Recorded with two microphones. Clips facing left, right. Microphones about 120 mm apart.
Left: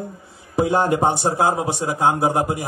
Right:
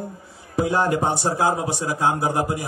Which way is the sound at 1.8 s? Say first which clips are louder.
Left 3 dB; 25° left (ahead or behind).